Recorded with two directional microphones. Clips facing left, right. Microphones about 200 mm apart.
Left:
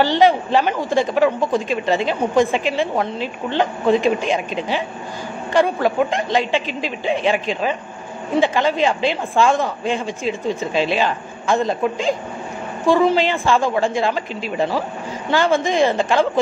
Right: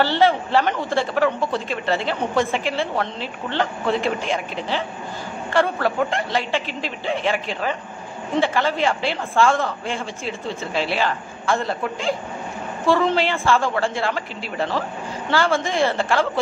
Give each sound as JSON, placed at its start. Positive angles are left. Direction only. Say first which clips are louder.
{"t": 0.0, "sound": "a man's voice", "louder": "left 3 dB", "side_deg": 15}